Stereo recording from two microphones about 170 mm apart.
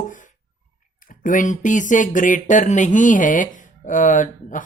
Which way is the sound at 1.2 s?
50° left (ahead or behind).